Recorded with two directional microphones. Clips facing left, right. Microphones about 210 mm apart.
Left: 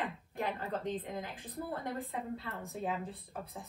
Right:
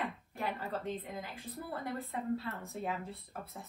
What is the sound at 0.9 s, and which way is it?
Speech, 50° left (ahead or behind).